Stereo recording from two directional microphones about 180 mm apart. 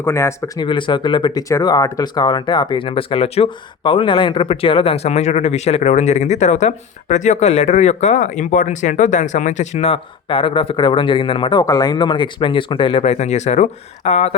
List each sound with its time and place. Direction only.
0.0 s speech: 15° left (ahead or behind); by 14.3 s 40° left (ahead or behind)